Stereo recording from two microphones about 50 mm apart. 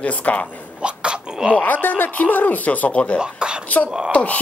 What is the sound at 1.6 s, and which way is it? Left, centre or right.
Speech, left.